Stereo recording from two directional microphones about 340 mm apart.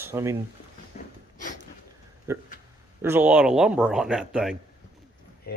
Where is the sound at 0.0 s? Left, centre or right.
Centre.